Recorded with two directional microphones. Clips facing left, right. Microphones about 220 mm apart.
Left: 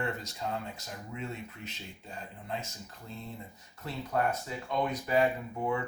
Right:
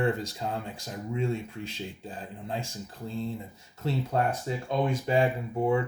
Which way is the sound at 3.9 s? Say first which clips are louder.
Right 4 dB; 30° right (ahead or behind).